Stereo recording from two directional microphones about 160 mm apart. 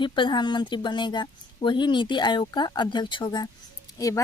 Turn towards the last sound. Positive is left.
turn(degrees=20)  # may be behind; listen again after turning